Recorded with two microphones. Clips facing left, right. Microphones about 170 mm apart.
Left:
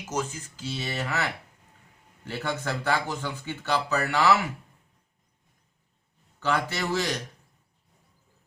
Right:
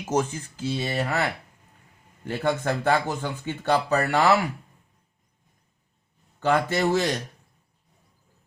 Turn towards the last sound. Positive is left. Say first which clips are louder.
# right 5 dB
turn(degrees=-45)  # may be behind; listen again after turning